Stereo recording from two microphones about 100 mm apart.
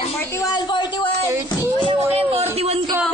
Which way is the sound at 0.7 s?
45° left (ahead or behind).